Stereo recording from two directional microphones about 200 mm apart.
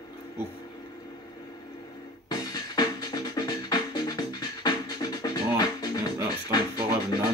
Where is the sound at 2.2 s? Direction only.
20° left (ahead or behind).